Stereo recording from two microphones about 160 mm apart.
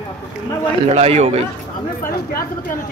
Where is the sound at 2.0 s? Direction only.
65° left (ahead or behind).